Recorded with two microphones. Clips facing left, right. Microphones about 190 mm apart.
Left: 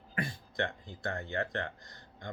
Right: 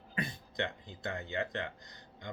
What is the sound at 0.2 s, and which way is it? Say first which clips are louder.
Speech: left 2 dB; 20° right (ahead or behind).